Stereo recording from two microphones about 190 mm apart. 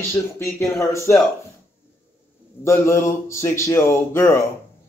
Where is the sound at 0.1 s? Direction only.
15° left (ahead or behind).